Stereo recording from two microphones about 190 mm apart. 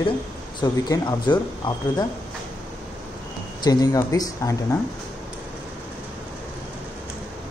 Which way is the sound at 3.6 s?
20° left (ahead or behind).